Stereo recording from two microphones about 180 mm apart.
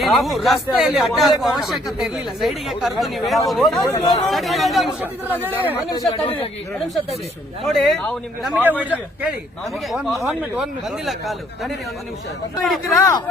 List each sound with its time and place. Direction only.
0.0 s speech: centre (ahead or behind)
3.8 s speech: 20° left (ahead or behind)
4.3 s speech: centre (ahead or behind)
5.4 s speech: 10° right (ahead or behind)
5.9 s speech: 25° left (ahead or behind)
7.6 s speech: centre (ahead or behind)
9.9 s speech: centre (ahead or behind)
12.9 s speech: 20° left (ahead or behind)